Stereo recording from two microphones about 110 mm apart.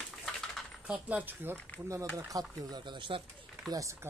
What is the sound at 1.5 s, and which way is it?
Speech, 15° left (ahead or behind).